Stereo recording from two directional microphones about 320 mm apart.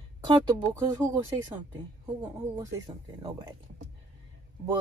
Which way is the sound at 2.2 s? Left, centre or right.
Centre.